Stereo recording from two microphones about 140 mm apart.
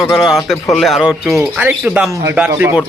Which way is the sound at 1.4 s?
10° right (ahead or behind).